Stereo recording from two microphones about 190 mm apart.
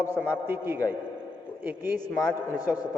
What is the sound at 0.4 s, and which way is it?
Speech, 10° right (ahead or behind).